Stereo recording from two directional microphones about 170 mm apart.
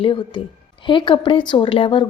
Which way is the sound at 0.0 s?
30° left (ahead or behind).